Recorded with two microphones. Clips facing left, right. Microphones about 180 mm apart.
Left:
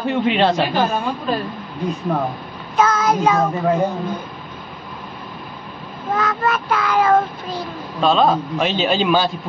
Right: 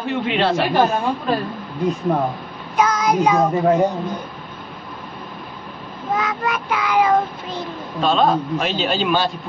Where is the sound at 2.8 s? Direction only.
15° right (ahead or behind).